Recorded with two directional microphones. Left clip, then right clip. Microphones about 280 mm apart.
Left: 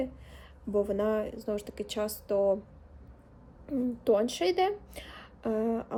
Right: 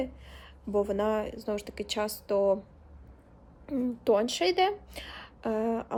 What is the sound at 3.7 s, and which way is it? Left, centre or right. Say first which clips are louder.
A woman's voice: right 1 dB; centre.